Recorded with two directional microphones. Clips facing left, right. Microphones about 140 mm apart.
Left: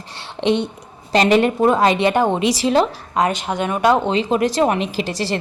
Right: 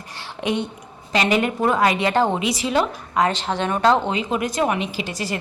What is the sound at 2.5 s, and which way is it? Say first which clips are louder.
Speech: left 5 dB; 35° left (ahead or behind).